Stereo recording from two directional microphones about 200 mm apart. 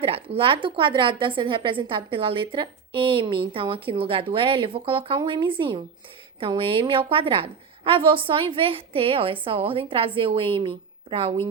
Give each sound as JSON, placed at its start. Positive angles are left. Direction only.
{"t": 0.0, "sound": "a woman's voice", "side_deg": -30}